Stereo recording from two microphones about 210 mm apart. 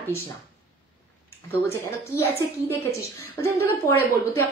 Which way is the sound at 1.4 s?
10° left (ahead or behind).